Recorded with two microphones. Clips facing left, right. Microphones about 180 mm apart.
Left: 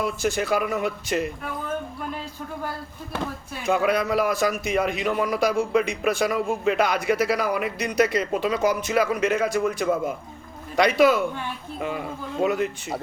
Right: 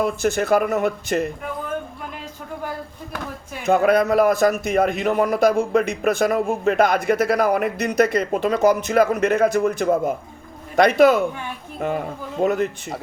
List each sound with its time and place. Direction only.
0.0 s a man's voice: 50° right (ahead or behind)
3.7 s a man's voice: 50° right (ahead or behind)